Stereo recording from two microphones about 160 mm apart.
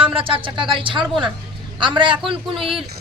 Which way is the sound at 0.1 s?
35° right (ahead or behind).